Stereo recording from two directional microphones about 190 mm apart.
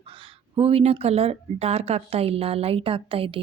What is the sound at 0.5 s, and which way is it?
A woman's voice, 30° right (ahead or behind).